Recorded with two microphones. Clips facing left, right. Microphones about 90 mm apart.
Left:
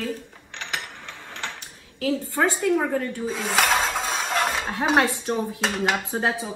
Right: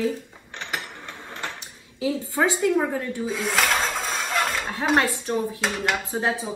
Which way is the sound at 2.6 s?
5° right (ahead or behind).